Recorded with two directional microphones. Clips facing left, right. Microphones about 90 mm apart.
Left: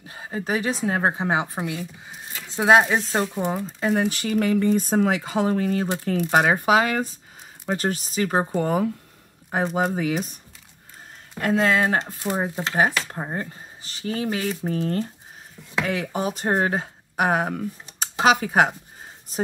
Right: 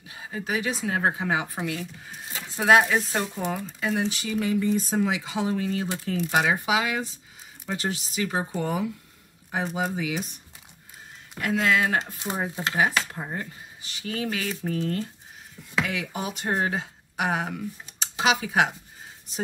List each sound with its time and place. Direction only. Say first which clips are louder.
0.1 s a woman's voice: left 4 dB; 35° left (ahead or behind); by 3.6 s 20° left (ahead or behind)
3.6 s speech: left 4 dB; 40° left (ahead or behind)
11.5 s a woman's voice: left 3 dB; 30° left (ahead or behind)